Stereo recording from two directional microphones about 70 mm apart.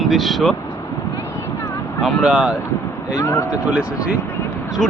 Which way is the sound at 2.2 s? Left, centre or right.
Centre.